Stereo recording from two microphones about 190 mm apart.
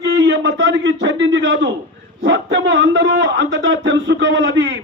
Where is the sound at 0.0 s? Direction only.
75° right (ahead or behind).